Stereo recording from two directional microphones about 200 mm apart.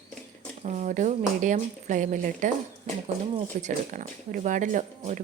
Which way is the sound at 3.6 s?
40° right (ahead or behind).